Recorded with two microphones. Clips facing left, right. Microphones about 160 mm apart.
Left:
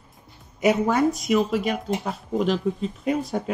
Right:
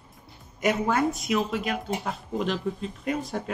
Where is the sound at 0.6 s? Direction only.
Centre (ahead or behind).